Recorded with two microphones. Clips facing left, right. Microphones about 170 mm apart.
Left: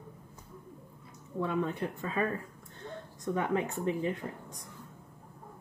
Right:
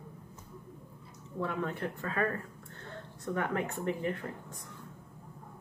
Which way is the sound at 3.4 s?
15° left (ahead or behind).